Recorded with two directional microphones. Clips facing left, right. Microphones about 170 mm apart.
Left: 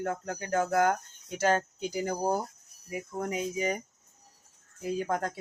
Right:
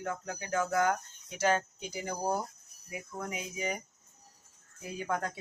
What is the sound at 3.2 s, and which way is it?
Speech, 40° left (ahead or behind).